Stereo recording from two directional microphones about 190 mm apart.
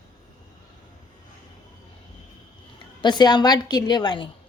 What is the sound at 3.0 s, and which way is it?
A woman's voice, 20° left (ahead or behind).